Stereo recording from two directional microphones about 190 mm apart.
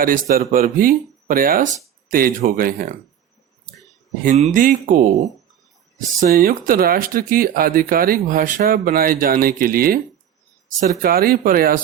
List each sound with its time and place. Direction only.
0.0 s speech: 50° right (ahead or behind)
4.2 s speech: 40° right (ahead or behind)
6.1 s speech: 50° right (ahead or behind)